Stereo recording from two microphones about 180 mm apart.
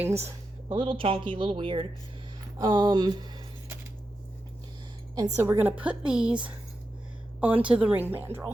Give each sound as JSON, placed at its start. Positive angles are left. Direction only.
{"t": 0.3, "sound": "speech", "side_deg": -25}
{"t": 5.1, "sound": "a woman's voice", "side_deg": -20}